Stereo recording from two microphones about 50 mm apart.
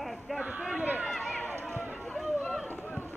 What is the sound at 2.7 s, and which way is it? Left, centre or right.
Run, left.